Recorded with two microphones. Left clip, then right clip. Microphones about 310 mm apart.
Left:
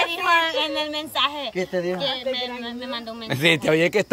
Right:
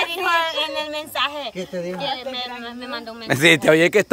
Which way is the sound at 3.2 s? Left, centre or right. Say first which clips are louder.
Right 5 dB; centre.